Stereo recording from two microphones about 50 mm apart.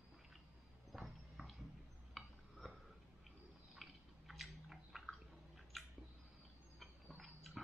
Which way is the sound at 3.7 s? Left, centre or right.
Centre.